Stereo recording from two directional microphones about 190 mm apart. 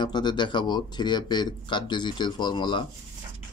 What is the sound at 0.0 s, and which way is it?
Speech, 25° left (ahead or behind).